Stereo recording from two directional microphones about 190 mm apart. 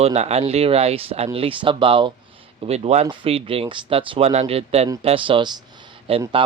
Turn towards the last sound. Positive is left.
turn(degrees=-30)  # may be behind; listen again after turning